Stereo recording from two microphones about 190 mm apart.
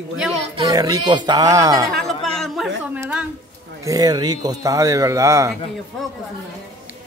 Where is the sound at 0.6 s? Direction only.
20° right (ahead or behind).